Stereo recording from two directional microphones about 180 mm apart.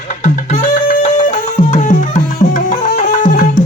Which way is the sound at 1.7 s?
45° left (ahead or behind).